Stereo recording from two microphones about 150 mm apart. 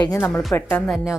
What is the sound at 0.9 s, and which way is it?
Speech, 5° right (ahead or behind).